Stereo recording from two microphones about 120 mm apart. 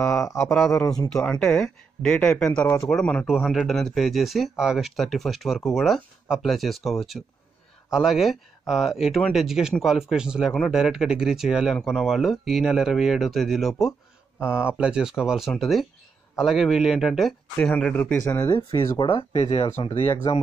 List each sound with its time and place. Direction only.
0.2 s speech: 25° left (ahead or behind)
0.5 s speech: centre (ahead or behind)
14.4 s speech: 10° right (ahead or behind); by 18.5 s 10° left (ahead or behind)
18.5 s speech: 40° left (ahead or behind)
19.0 s speech: 50° left (ahead or behind)